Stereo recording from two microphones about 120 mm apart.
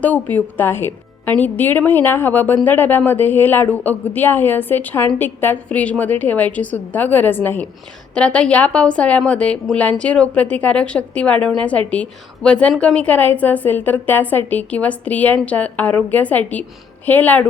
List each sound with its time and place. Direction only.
0.0 s speech: 15° left (ahead or behind)